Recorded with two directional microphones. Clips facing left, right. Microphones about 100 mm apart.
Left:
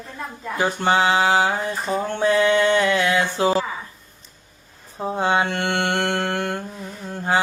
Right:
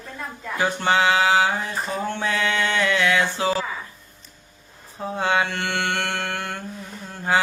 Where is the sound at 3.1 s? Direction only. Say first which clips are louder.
Left 3 dB; 40° left (ahead or behind).